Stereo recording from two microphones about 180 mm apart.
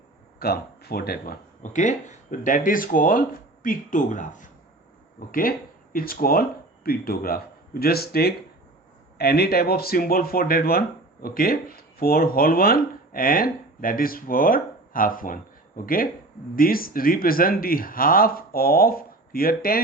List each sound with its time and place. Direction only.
0.3 s speech: 60° left (ahead or behind)